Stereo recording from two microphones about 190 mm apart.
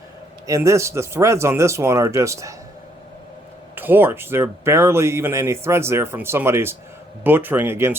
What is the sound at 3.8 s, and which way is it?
Speech, 10° right (ahead or behind).